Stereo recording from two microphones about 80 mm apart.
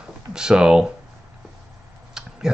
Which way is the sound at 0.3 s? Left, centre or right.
Centre.